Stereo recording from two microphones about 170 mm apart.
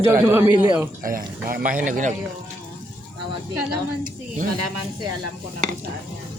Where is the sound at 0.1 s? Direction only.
15° right (ahead or behind).